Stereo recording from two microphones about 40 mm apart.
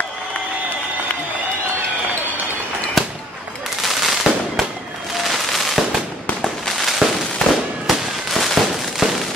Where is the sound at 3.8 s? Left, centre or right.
Centre.